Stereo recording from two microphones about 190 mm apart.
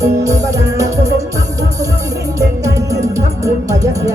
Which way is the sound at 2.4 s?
15° right (ahead or behind).